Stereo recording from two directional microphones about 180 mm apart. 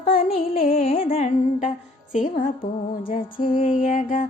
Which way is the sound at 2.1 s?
45° left (ahead or behind).